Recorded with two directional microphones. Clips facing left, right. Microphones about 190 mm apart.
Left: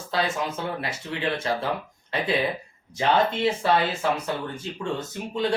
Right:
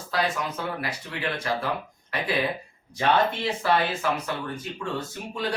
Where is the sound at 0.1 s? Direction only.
25° left (ahead or behind).